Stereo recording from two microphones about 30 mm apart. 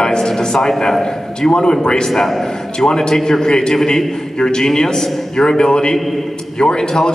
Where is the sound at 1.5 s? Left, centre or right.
Left.